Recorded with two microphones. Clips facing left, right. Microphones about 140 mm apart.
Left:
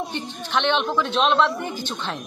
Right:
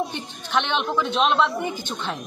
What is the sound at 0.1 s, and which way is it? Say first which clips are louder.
A woman's voice: even; 5° right (ahead or behind).